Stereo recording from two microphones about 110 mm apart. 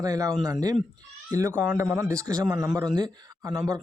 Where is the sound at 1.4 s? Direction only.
25° right (ahead or behind).